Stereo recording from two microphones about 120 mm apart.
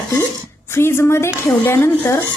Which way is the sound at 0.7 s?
20° left (ahead or behind).